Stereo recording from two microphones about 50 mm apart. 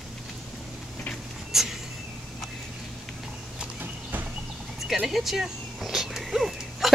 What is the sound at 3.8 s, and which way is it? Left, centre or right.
Clip-clop, right.